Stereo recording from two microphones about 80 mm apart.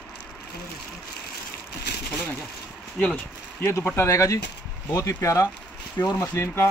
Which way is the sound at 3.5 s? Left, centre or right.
Left.